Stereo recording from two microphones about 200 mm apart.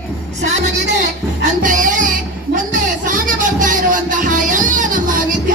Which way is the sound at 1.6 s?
40° right (ahead or behind).